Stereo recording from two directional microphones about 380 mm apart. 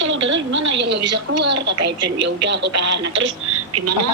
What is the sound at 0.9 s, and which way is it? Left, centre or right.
A woman's voice, right.